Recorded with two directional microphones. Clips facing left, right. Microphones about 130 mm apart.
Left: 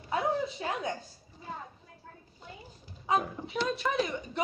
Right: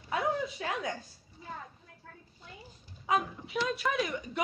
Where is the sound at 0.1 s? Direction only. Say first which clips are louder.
Left 1 dB; 25° left (ahead or behind).